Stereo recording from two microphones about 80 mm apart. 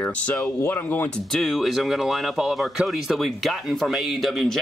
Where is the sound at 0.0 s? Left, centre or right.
Left.